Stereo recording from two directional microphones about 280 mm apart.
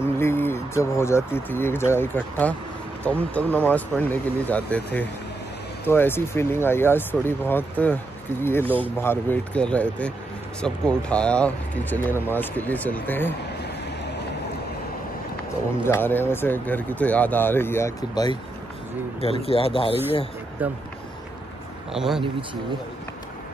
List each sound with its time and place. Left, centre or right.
0.0 s speech: centre
15.8 s speech: centre
20.6 s speech: centre
21.9 s speech: centre